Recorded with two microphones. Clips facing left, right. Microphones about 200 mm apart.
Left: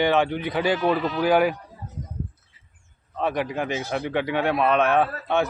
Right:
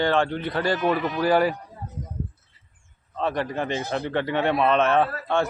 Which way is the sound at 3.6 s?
5° left (ahead or behind).